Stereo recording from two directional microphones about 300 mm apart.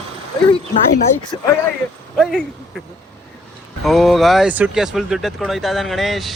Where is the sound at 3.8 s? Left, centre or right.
Centre.